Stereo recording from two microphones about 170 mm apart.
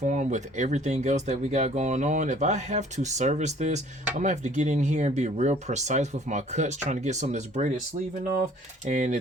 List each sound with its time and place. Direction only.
0.0 s speech: 45° right (ahead or behind)
8.8 s speech: 45° right (ahead or behind)